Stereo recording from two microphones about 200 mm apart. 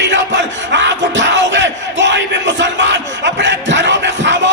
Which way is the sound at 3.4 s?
65° right (ahead or behind).